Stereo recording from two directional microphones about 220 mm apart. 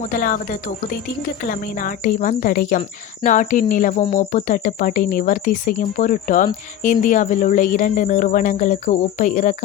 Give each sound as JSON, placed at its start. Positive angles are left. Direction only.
{"t": 0.1, "sound": "speech", "side_deg": 40}
{"t": 1.5, "sound": "speech", "side_deg": 40}